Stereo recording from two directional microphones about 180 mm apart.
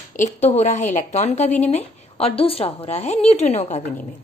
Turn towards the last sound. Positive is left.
turn(degrees=35)  # may be behind; listen again after turning